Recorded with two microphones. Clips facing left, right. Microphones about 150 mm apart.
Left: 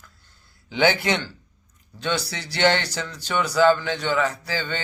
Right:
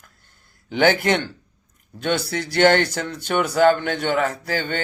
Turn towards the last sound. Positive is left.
turn(degrees=-50)  # may be behind; listen again after turning